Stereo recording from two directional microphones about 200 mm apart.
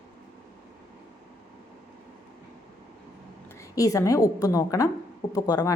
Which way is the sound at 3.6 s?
15° left (ahead or behind).